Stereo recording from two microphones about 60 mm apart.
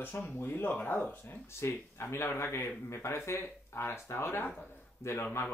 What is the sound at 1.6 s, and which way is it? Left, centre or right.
Speech, left.